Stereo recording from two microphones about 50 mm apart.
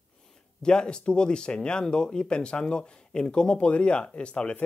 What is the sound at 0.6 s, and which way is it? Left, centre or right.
Speech, centre.